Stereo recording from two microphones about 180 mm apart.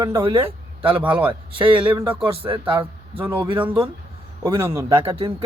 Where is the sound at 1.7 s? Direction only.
10° right (ahead or behind).